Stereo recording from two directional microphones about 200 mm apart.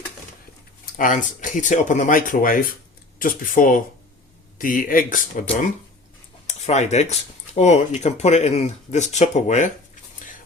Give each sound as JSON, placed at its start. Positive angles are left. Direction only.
{"t": 0.9, "sound": "speech", "side_deg": 40}
{"t": 6.7, "sound": "speech", "side_deg": 35}